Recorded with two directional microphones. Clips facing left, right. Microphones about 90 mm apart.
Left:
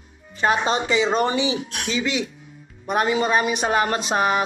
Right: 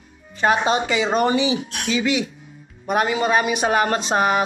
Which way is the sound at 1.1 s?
25° left (ahead or behind).